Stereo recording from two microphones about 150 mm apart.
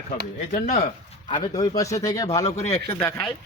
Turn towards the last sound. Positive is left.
turn(degrees=15)  # may be behind; listen again after turning